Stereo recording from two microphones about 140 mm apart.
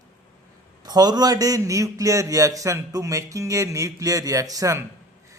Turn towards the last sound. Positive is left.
turn(degrees=-25)  # may be behind; listen again after turning